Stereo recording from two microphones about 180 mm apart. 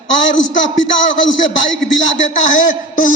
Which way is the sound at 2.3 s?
45° left (ahead or behind).